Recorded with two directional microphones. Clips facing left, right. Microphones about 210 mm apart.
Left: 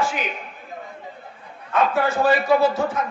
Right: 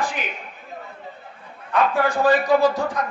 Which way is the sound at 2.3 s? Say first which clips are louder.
Right 1 dB; 15° right (ahead or behind).